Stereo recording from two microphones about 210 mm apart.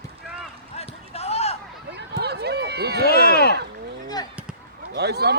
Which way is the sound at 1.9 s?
50° right (ahead or behind).